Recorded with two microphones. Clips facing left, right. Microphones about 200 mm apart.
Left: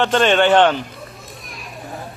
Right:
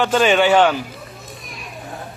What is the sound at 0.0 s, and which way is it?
Speech, centre (ahead or behind).